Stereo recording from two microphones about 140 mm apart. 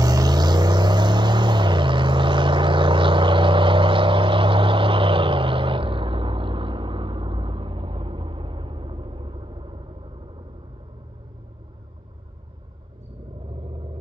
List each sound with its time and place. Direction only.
0.0 s vehicle: 25° right (ahead or behind)